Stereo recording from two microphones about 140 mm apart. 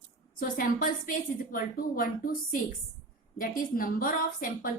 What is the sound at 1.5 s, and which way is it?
A woman's voice, 90° left.